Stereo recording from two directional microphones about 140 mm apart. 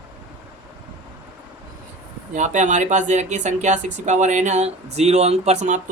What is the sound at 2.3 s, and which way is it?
Speech, 60° right (ahead or behind).